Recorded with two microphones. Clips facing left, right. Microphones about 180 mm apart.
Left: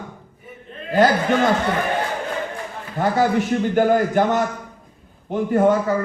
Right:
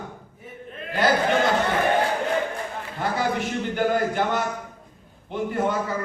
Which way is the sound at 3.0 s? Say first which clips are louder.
Left 7 dB; 45° left (ahead or behind).